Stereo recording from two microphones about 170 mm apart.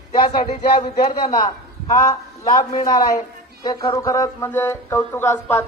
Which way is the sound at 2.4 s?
30° left (ahead or behind).